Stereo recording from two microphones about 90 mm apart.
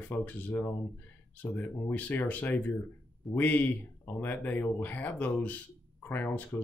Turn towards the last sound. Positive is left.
turn(degrees=20)  # may be behind; listen again after turning